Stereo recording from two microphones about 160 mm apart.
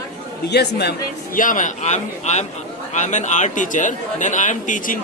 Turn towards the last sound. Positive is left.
turn(degrees=55)  # may be behind; listen again after turning